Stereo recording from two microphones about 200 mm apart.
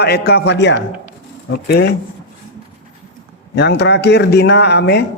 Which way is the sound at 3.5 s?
60° left (ahead or behind).